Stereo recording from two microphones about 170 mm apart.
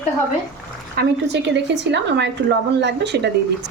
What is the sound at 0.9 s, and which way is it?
A woman's voice, 85° right.